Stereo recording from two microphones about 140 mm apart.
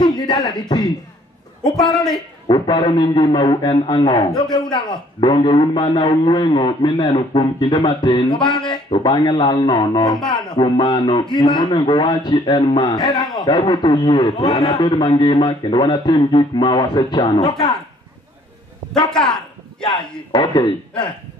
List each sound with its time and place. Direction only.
0.0 s speech: 30° left (ahead or behind)
2.4 s a man's voice: 35° left (ahead or behind)
10.1 s speech: 5° left (ahead or behind)
10.5 s a man's voice: 35° left (ahead or behind)
12.8 s a man's voice: 25° left (ahead or behind)
13.2 s speech: centre (ahead or behind)
13.5 s a man's voice: 30° left (ahead or behind)
19.0 s speech: 5° left (ahead or behind)
20.3 s a man's voice: 35° left (ahead or behind)